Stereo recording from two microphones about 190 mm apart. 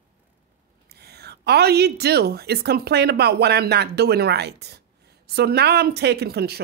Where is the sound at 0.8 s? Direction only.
60° right (ahead or behind).